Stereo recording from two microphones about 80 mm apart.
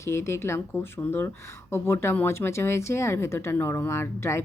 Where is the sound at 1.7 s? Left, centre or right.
Left.